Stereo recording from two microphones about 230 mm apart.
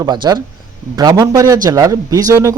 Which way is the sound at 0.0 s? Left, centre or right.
Centre.